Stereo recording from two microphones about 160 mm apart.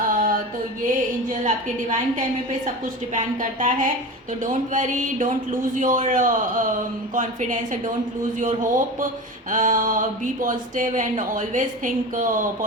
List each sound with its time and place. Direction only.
0.1 s music: 55° right (ahead or behind)
1.3 s speech: 50° right (ahead or behind)